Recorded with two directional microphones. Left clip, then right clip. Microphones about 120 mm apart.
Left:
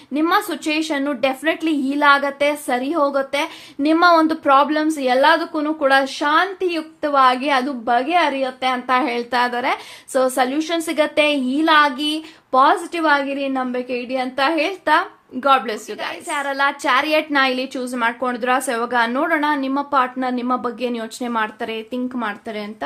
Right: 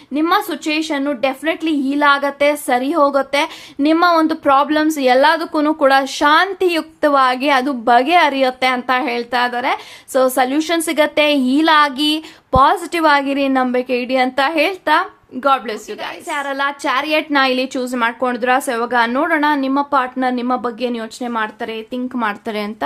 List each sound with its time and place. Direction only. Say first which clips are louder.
0.1 s a woman's voice: right 2 dB; 15° right (ahead or behind); by 5.9 s 30° right (ahead or behind)
5.9 s a woman's voice: right 2 dB; 20° right (ahead or behind)
6.1 s a woman's voice: right 5 dB; 30° right (ahead or behind)
7.3 s a woman's voice: right 2 dB; 25° right (ahead or behind); by 8.7 s 40° right (ahead or behind)
8.9 s a woman's voice: right 1 dB; 10° right (ahead or behind)
10.1 s a woman's voice: right 3 dB; 20° right (ahead or behind)
10.5 s a woman's voice: right 4 dB; 30° right (ahead or behind)
14.8 s a woman's voice: right 2 dB; 10° right (ahead or behind)
16.0 s a woman's voice: right 1 dB; 15° right (ahead or behind)
21.2 s a woman's voice: even; 5° right (ahead or behind)
22.1 s a woman's voice: right 5 dB; 25° right (ahead or behind)